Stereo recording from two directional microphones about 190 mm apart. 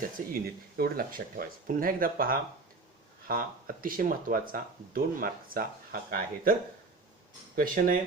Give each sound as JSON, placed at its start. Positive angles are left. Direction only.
{"t": 0.4, "sound": "speech", "side_deg": -55}